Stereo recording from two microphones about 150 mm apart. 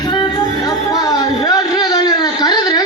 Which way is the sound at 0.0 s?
30° left (ahead or behind).